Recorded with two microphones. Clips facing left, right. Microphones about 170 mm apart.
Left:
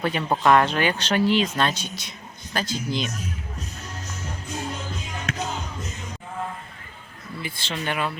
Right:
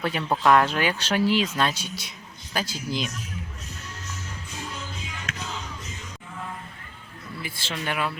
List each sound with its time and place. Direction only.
0.0 s speech: 5° right (ahead or behind)
4.0 s music: 40° left (ahead or behind)
7.4 s speech: 5° right (ahead or behind)